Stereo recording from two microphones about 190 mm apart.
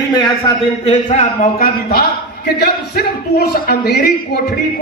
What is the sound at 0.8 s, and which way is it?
Music, 40° left (ahead or behind).